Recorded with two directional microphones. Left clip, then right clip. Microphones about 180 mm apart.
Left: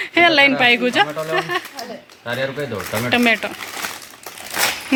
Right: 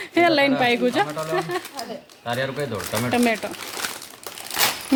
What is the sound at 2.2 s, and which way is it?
Speech, 50° left (ahead or behind).